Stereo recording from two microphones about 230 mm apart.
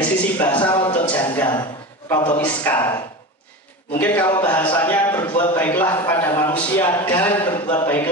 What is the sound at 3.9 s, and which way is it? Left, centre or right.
A man's voice, centre.